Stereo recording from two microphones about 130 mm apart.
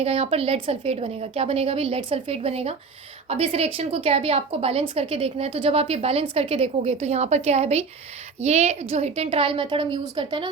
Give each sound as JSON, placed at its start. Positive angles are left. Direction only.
{"t": 0.0, "sound": "a woman's voice", "side_deg": -50}